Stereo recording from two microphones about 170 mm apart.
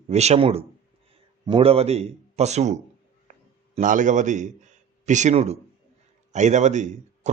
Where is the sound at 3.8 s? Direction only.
50° right (ahead or behind).